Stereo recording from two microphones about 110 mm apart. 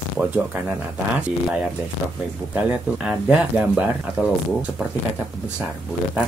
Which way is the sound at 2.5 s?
10° right (ahead or behind).